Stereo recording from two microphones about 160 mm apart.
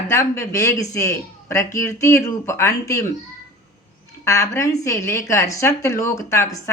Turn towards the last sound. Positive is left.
turn(degrees=20)  # may be behind; listen again after turning